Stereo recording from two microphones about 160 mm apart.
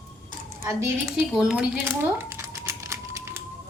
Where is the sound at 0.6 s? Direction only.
20° right (ahead or behind).